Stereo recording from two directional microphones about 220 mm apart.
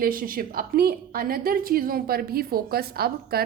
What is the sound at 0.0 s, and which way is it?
A woman's voice, 40° right (ahead or behind).